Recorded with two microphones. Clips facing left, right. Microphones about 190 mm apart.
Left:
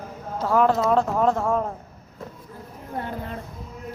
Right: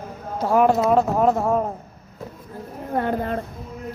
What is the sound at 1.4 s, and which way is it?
Speech, 20° right (ahead or behind).